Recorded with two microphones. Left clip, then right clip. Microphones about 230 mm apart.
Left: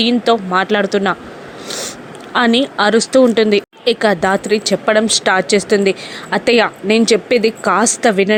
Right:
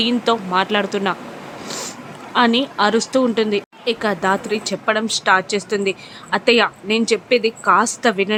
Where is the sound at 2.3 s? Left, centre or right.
Left.